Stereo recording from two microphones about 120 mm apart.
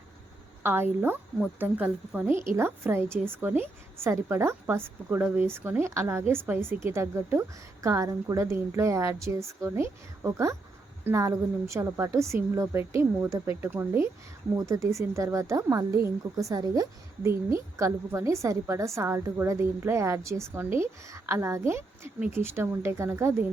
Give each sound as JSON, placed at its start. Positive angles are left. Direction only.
{"t": 0.6, "sound": "a woman's voice", "side_deg": -20}